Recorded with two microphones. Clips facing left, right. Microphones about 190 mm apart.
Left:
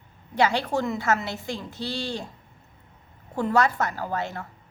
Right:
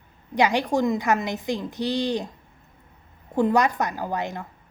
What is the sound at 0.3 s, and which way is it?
A woman's voice, 15° right (ahead or behind).